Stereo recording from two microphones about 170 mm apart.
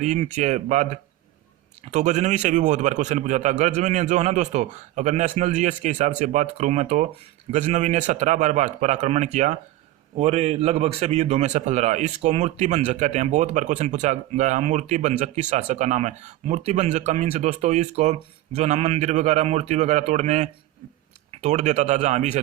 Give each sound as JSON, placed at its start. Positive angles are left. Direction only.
{"t": 0.0, "sound": "a man's voice", "side_deg": -45}